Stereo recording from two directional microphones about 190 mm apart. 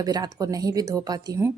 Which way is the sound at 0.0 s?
20° right (ahead or behind).